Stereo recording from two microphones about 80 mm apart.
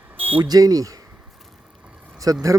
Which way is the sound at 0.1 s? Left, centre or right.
Right.